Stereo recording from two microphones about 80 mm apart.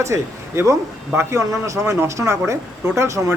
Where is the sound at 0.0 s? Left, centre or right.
Right.